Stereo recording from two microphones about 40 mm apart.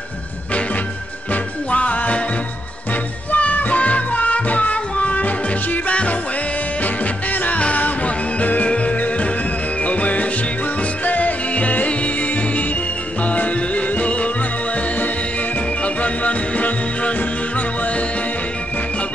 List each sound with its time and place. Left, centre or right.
1.3 s music: left
3.3 s music: left
15.8 s music: left